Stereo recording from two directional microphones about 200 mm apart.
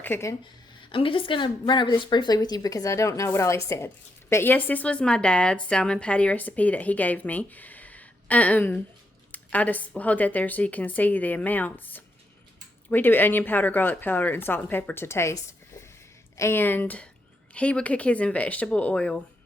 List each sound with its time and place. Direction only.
0.0 s speech: 10° left (ahead or behind)
0.9 s a woman's voice: 25° left (ahead or behind)
16.4 s a woman's voice: 10° left (ahead or behind)